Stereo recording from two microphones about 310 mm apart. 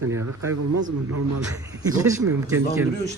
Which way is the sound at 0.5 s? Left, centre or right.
Right.